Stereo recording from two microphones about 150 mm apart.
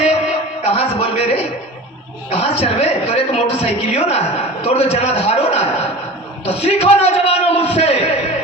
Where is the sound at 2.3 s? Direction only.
45° left (ahead or behind).